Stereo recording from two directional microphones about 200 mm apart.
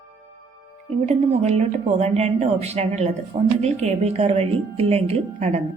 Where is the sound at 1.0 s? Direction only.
35° right (ahead or behind).